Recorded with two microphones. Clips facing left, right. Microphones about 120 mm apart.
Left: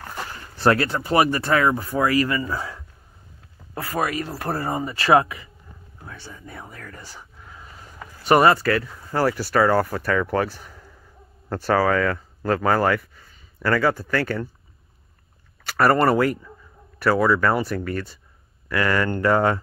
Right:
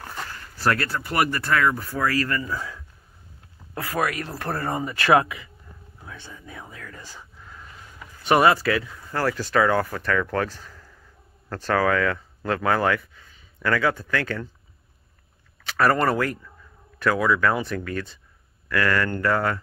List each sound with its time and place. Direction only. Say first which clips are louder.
0.1 s a sound: left 3 dB; 15° left (ahead or behind)
0.4 s speech: left 5 dB; 25° left (ahead or behind)
3.7 s speech: left 1 dB; 5° left (ahead or behind)
4.9 s speech: left 1 dB; 25° left (ahead or behind)
6.5 s speech: even; 10° left (ahead or behind)
8.2 s speech: left 2 dB; centre (ahead or behind)
9.1 s speech: left 2 dB; 10° left (ahead or behind)
15.6 s speech: left 3 dB; 5° left (ahead or behind)